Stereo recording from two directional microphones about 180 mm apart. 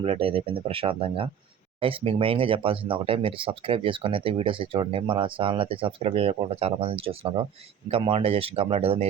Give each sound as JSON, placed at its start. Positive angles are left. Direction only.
{"t": 0.0, "sound": "speech", "side_deg": -30}